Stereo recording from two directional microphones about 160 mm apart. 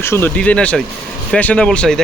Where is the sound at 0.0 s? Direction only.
15° left (ahead or behind).